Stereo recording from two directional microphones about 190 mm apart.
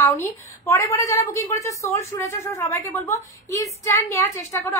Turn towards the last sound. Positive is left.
turn(degrees=15)  # may be behind; listen again after turning